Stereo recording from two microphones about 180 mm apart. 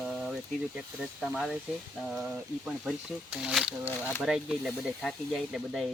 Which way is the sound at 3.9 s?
10° left (ahead or behind).